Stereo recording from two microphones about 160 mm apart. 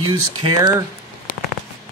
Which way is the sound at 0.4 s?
25° right (ahead or behind).